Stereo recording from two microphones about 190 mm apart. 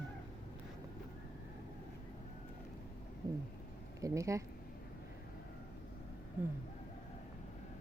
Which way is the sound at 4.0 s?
15° right (ahead or behind).